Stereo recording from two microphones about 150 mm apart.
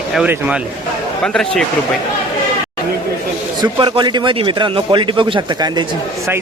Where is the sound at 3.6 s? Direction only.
30° right (ahead or behind).